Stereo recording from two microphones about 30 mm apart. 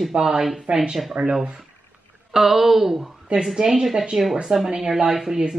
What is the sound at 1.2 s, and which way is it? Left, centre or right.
Speech, right.